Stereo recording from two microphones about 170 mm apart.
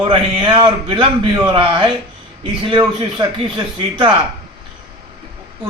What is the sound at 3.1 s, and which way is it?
Speech, 30° right (ahead or behind).